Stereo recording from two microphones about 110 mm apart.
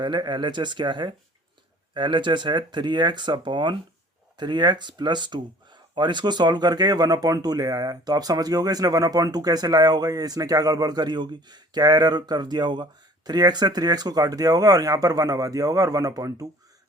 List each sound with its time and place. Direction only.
0.0 s speech: 45° right (ahead or behind)